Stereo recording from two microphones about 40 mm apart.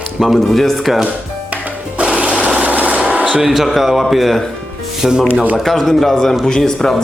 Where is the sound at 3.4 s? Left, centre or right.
Centre.